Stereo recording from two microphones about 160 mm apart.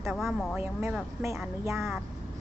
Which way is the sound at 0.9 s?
15° right (ahead or behind).